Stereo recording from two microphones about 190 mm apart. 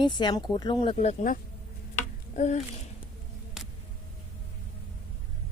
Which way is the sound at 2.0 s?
40° left (ahead or behind).